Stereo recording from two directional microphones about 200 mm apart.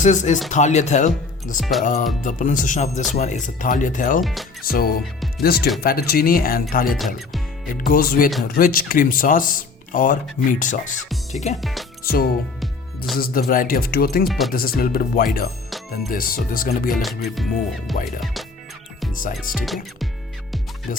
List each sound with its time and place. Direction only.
0.0 s speech: 35° left (ahead or behind)
4.2 s speech: centre (ahead or behind)
4.6 s speech: 50° left (ahead or behind)
11.6 s speech: centre (ahead or behind)
12.0 s speech: 50° left (ahead or behind)
14.3 s speech: centre (ahead or behind)
14.5 s speech: 45° left (ahead or behind)
16.9 s speech: centre (ahead or behind)
19.5 s speech: centre (ahead or behind)